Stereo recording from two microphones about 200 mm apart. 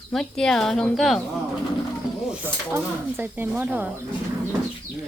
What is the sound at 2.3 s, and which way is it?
Speech, 10° right (ahead or behind).